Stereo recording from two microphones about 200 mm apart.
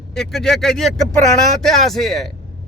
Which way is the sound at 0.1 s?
Centre (ahead or behind).